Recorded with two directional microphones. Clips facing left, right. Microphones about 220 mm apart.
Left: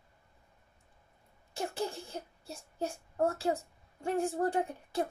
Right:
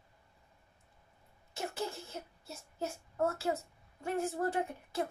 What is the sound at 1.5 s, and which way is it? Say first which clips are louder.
Child singing: left 3 dB; 30° left (ahead or behind).